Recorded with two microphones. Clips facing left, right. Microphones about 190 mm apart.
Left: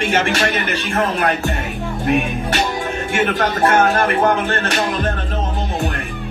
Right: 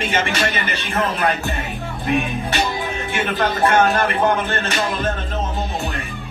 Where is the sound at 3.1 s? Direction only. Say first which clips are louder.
Left 3 dB; 40° left (ahead or behind).